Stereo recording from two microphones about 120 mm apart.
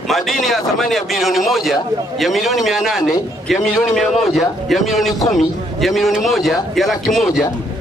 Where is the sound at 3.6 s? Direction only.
25° left (ahead or behind).